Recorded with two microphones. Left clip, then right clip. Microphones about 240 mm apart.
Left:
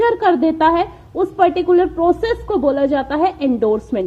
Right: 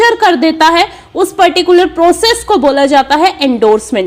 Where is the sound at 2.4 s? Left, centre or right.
Right.